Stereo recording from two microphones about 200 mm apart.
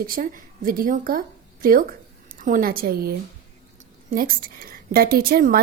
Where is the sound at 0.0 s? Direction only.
45° right (ahead or behind).